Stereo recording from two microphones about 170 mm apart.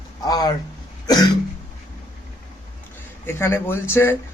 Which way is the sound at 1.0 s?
25° left (ahead or behind).